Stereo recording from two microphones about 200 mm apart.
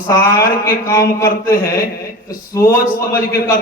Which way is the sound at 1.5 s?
45° left (ahead or behind).